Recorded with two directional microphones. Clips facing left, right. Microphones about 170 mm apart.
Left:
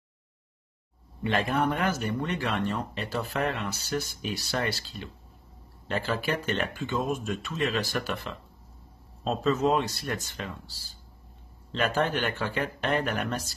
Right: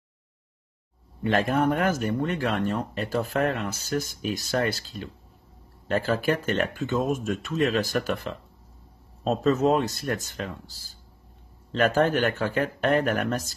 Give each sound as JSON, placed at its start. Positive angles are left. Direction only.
{"t": 1.2, "sound": "speech", "side_deg": -45}
{"t": 11.7, "sound": "speech", "side_deg": -45}